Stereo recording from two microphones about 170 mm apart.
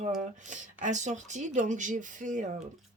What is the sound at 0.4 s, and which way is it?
Speech, 45° right (ahead or behind).